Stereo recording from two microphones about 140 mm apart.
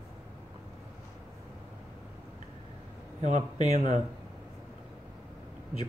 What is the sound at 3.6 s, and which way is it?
Speech, 55° right (ahead or behind).